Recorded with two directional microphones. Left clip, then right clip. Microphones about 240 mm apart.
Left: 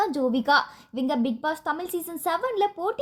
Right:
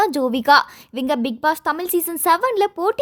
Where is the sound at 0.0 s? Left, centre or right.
Right.